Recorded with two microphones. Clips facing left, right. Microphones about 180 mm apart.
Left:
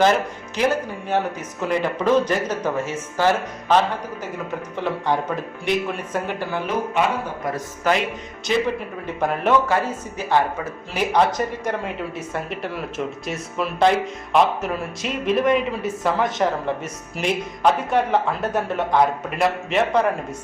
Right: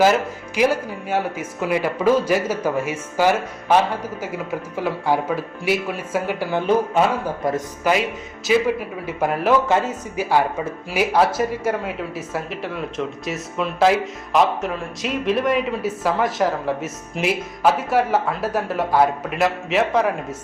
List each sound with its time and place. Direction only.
0.0 s speech: 10° right (ahead or behind)
7.9 s speech: 10° right (ahead or behind)
9.6 s speech: 20° right (ahead or behind)
10.2 s speech: 10° right (ahead or behind)